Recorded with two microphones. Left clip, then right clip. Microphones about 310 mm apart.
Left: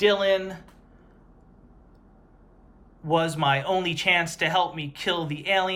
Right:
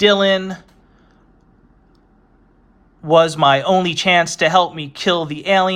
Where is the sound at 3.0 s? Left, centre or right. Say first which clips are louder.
Right 11 dB; centre.